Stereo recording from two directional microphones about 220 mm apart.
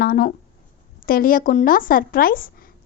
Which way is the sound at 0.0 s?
45° left (ahead or behind).